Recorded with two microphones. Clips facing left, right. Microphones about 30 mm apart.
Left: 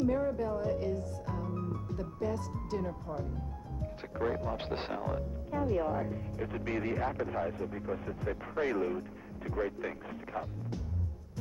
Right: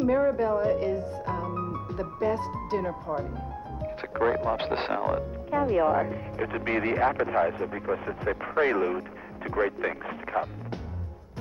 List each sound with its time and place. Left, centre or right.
0.0 s speech: right